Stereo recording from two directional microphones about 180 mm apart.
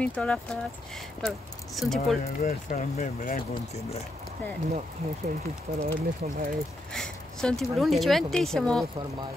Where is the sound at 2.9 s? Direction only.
45° left (ahead or behind).